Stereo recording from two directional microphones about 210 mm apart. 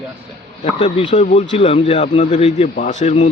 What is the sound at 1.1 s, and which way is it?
A man's voice, 35° left (ahead or behind).